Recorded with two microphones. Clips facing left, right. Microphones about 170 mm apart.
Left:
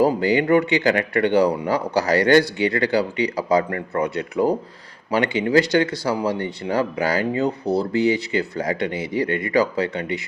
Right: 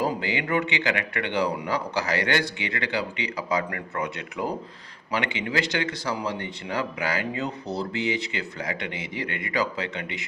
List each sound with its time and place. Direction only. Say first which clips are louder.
0.0 s speech: left 9 dB; 40° left (ahead or behind)